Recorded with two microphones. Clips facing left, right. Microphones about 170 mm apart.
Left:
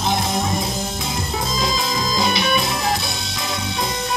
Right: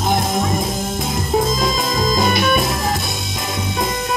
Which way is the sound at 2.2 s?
50° right (ahead or behind).